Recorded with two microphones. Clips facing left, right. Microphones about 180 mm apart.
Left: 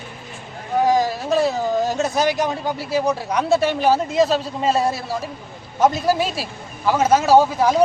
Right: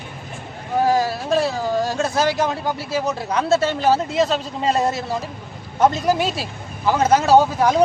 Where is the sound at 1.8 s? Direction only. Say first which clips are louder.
Even; 20° left (ahead or behind).